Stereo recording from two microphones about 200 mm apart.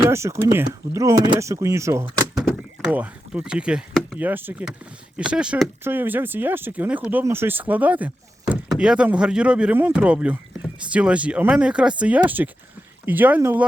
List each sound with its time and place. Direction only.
0.0 s speech: 15° right (ahead or behind)
2.0 s door: 20° right (ahead or behind)
2.9 s speech: 5° right (ahead or behind)